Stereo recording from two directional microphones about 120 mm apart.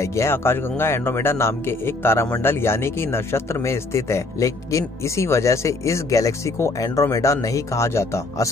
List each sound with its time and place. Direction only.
0.0 s speech: 25° left (ahead or behind)